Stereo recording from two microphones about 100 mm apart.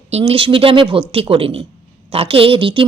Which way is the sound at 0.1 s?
90° right.